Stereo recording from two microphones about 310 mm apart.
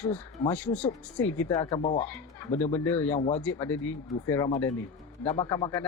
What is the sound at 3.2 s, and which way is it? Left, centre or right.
Speech, left.